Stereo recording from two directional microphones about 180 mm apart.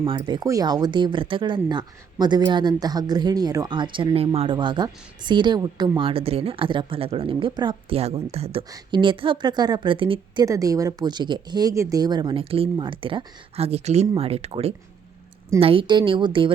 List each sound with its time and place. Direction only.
0.3 s speech: 20° right (ahead or behind)
10.4 s speech: 20° right (ahead or behind)